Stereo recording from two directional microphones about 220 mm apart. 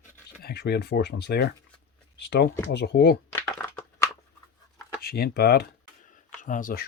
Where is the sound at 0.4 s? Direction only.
45° left (ahead or behind).